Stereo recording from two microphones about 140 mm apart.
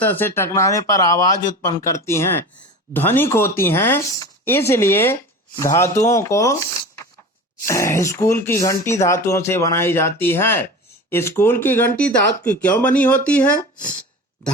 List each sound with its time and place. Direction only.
0.0 s speech: 15° left (ahead or behind)
7.7 s speech: 20° left (ahead or behind)